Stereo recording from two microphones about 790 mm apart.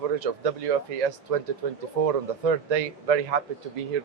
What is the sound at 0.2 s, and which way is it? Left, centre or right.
A man's voice, right.